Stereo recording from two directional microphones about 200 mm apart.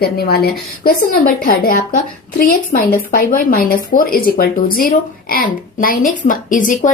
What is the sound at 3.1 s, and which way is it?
Speech, 45° left (ahead or behind).